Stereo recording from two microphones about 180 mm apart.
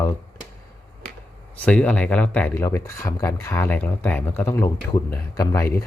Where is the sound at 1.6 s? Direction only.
5° left (ahead or behind).